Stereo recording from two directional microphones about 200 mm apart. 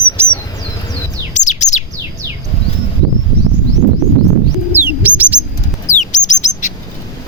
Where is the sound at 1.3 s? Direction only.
35° left (ahead or behind).